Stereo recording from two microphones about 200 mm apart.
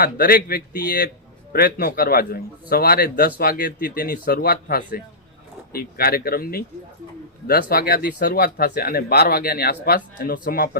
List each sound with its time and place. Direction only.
0.0 s a man's voice: 50° left (ahead or behind)